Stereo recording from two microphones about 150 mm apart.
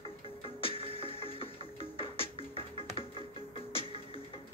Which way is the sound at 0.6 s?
35° left (ahead or behind).